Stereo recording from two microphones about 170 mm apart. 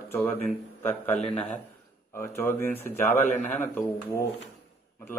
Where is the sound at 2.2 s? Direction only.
15° left (ahead or behind).